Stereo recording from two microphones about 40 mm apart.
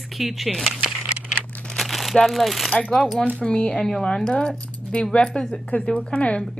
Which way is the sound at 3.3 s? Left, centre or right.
Left.